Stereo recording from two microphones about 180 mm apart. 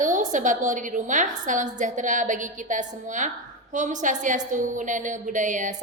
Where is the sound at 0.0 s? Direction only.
45° right (ahead or behind).